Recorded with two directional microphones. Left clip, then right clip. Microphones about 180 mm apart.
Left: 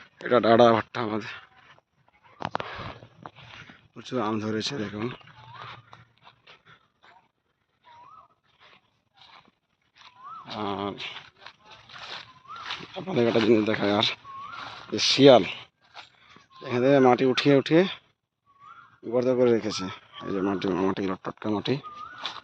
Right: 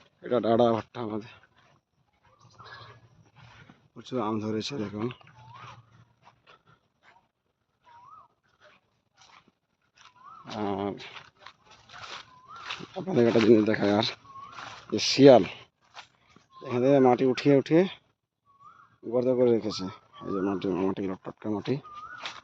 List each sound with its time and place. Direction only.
0.2 s speech: 5° left (ahead or behind)
3.7 s speech: 5° left (ahead or behind)
6.4 s dog: 5° right (ahead or behind)
7.9 s dog: 10° left (ahead or behind)
9.1 s a sound: 15° left (ahead or behind)
10.0 s dog: 10° left (ahead or behind)
10.6 s speech: 25° right (ahead or behind)
11.3 s a sound: 10° left (ahead or behind)
12.9 s speech: 30° right (ahead or behind)
16.3 s speech: centre (ahead or behind)
19.0 s speech: 5° right (ahead or behind)